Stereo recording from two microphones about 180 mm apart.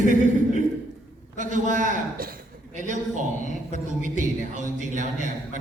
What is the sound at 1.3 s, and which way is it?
A man's voice, 45° right (ahead or behind).